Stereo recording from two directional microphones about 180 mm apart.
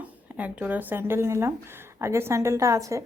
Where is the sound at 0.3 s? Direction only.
10° right (ahead or behind).